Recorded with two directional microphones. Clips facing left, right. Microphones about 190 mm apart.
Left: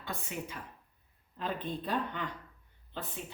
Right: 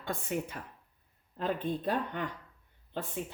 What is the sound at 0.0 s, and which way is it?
Speech, 50° right (ahead or behind).